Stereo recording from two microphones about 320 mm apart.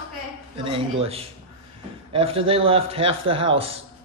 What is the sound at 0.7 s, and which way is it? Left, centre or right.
A man's voice, centre.